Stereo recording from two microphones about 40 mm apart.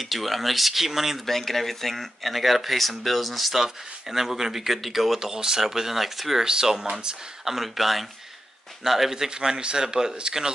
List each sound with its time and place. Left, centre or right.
0.0 s speech: centre
1.2 s speech: centre
5.3 s speech: centre
6.4 s speech: centre
7.4 s speech: centre